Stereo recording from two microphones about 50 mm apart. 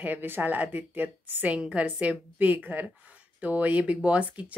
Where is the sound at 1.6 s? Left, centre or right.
Right.